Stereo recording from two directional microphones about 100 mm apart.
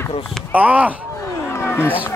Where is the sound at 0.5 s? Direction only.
15° right (ahead or behind).